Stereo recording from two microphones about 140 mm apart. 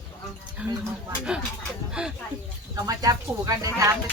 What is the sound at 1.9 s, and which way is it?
Speech, 5° right (ahead or behind).